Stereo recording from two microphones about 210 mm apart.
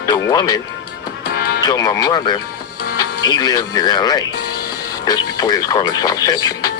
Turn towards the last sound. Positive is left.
turn(degrees=15)  # may be behind; listen again after turning